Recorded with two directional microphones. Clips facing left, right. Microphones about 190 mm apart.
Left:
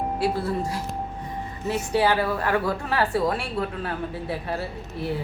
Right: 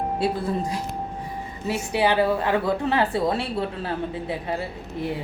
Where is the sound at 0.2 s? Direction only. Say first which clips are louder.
Even; 15° right (ahead or behind).